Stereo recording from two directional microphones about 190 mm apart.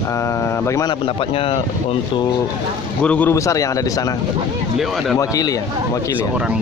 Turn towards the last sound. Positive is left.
turn(degrees=20)  # may be behind; listen again after turning